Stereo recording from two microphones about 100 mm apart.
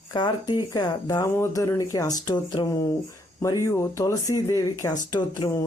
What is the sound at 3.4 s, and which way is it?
Speech, 30° left (ahead or behind).